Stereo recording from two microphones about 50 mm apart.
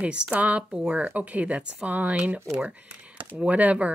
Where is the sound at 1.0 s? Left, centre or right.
Right.